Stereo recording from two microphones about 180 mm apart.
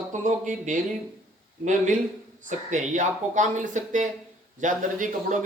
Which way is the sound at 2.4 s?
45° right (ahead or behind).